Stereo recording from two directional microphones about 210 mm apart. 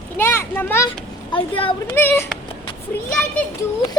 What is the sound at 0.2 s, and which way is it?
Speech, 10° left (ahead or behind).